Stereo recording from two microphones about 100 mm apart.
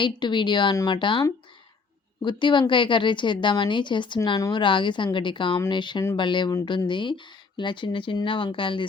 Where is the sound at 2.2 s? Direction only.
50° left (ahead or behind).